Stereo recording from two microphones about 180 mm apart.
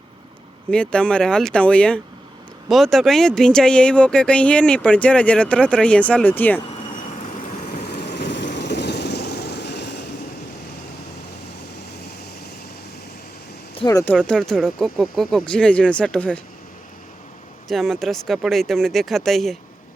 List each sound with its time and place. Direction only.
0.7 s speech: 5° left (ahead or behind)
7.4 s vehicle: 40° left (ahead or behind)
7.9 s vehicle: 70° left (ahead or behind)
13.7 s a sound: 20° left (ahead or behind)
14.0 s speech: 5° left (ahead or behind)
17.7 s speech: centre (ahead or behind)